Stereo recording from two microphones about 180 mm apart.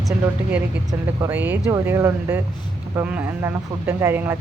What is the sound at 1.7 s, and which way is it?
Speech, 15° right (ahead or behind).